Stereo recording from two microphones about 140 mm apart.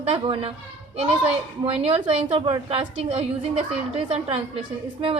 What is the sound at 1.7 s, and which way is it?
A woman's voice, 45° right (ahead or behind).